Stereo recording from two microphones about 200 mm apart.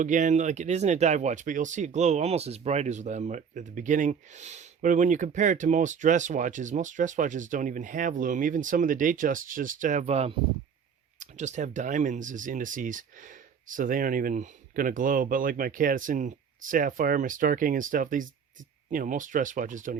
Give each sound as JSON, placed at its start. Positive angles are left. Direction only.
{"t": 0.0, "sound": "speech", "side_deg": -40}